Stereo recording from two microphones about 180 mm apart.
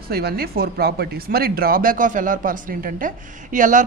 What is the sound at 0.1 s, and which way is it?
Speech, 60° right (ahead or behind).